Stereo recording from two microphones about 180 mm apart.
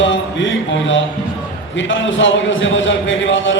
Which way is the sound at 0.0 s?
90° left.